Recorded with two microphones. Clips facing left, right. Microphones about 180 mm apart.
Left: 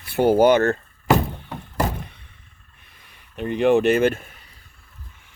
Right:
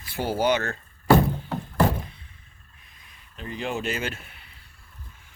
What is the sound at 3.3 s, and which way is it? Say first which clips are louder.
Speech: left 13 dB; 65° left (ahead or behind).